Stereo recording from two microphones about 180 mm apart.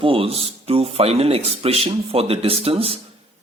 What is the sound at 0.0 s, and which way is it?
Speech, 30° right (ahead or behind).